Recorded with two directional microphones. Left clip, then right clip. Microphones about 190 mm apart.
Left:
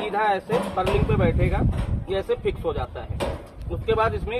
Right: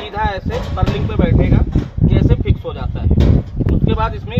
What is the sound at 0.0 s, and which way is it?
Speech, 15° left (ahead or behind).